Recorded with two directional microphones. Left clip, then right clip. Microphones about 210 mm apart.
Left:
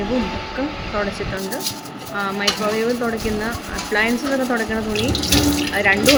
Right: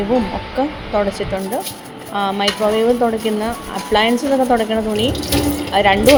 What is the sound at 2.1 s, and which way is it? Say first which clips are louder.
Speech: right 5 dB; 15° right (ahead or behind).